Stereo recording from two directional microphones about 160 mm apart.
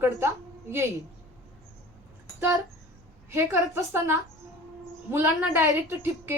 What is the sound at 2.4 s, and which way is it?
A woman's voice, 15° right (ahead or behind).